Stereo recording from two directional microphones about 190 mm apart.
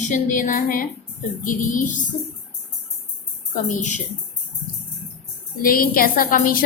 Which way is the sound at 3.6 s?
40° left (ahead or behind).